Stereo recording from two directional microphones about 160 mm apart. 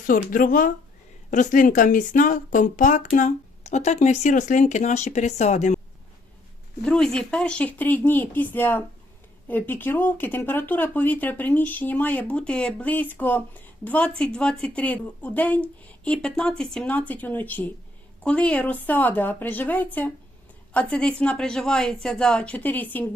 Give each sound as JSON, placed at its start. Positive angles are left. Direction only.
{"t": 0.1, "sound": "speech", "side_deg": 60}
{"t": 6.8, "sound": "a woman's voice", "side_deg": 5}